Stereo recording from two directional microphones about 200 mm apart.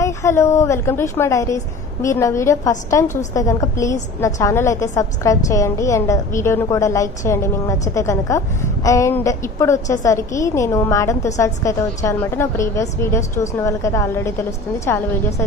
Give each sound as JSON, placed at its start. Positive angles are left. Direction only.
{"t": 0.0, "sound": "a woman's voice", "side_deg": 15}